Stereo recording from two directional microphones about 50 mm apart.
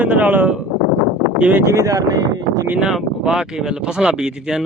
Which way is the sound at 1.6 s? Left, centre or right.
Right.